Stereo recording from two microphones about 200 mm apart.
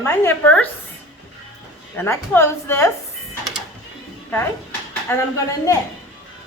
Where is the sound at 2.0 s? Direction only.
10° left (ahead or behind).